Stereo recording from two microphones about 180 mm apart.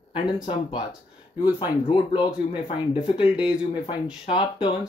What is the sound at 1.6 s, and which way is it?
Speech, 25° left (ahead or behind).